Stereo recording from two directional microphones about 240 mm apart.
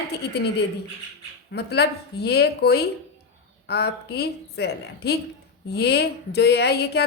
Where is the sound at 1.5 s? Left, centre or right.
Left.